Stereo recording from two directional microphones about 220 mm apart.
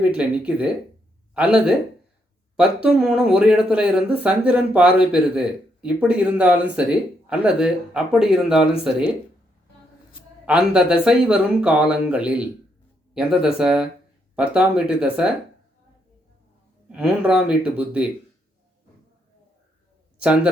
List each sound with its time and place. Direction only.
0.0 s speech: 5° right (ahead or behind)
10.4 s speech: 5° right (ahead or behind)
16.9 s speech: 5° right (ahead or behind)
20.1 s a man's voice: 5° right (ahead or behind)